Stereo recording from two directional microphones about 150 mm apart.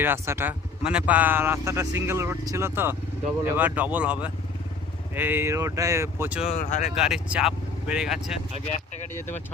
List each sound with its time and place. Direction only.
0.0 s speech: 15° right (ahead or behind)
6.5 s speech: 55° left (ahead or behind)
6.9 s speech: 5° right (ahead or behind)